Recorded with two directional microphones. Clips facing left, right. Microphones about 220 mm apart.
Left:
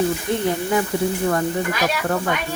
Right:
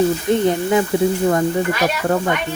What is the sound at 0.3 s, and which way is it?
Speech, 20° right (ahead or behind).